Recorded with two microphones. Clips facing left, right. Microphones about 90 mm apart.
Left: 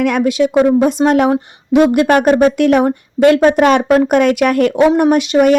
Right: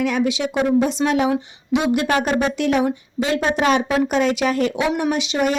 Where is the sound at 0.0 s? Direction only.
55° left (ahead or behind).